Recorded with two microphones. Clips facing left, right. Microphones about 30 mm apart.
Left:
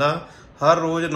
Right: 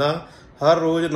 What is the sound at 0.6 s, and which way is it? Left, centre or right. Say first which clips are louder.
Speech: right 1 dB; right.